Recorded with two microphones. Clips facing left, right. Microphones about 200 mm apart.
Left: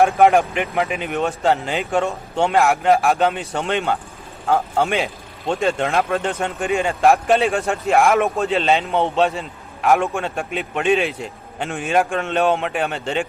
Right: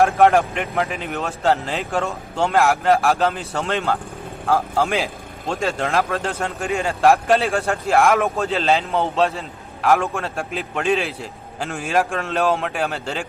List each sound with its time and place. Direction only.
0.0 s a man's voice: centre (ahead or behind)